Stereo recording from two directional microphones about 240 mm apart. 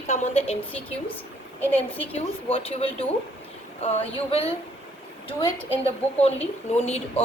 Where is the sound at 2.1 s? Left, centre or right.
Left.